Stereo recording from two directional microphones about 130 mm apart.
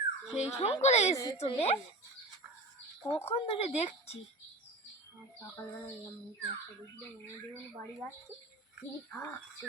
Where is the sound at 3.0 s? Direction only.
50° left (ahead or behind).